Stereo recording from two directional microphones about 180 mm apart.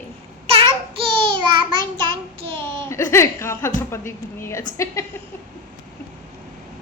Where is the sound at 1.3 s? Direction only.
25° right (ahead or behind).